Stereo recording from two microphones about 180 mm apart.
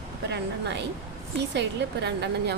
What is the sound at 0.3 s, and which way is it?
A woman's voice, 75° right (ahead or behind).